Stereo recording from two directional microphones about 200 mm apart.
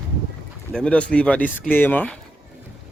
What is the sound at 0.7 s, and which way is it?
Speech, 5° left (ahead or behind).